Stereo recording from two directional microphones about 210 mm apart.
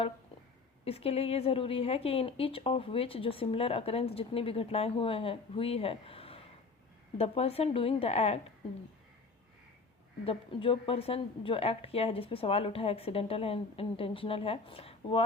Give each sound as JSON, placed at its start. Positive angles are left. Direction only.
{"t": 0.9, "sound": "a woman's voice", "side_deg": 30}
{"t": 10.2, "sound": "a woman's voice", "side_deg": 25}